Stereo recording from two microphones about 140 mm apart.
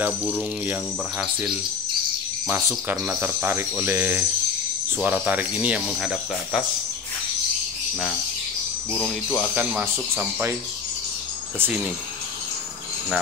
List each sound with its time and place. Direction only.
3.2 s speech: 15° right (ahead or behind)
8.9 s speech: 20° left (ahead or behind)
9.6 s speech: 10° right (ahead or behind)
11.6 s speech: 10° right (ahead or behind)